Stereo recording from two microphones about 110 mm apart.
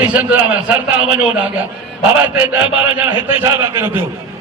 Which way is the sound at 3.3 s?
25° right (ahead or behind).